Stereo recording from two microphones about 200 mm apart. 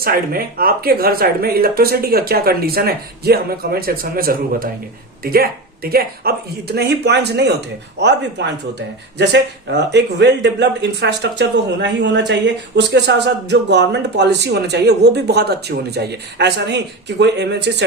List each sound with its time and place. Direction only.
0.0 s speech: 50° right (ahead or behind)